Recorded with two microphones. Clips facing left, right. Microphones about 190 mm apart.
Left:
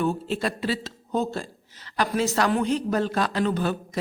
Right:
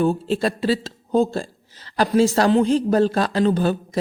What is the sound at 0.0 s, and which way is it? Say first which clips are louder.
A woman's voice: right 6 dB; 35° right (ahead or behind).